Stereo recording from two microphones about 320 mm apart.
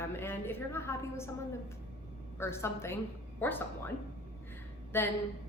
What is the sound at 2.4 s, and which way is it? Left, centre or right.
A woman's voice, centre.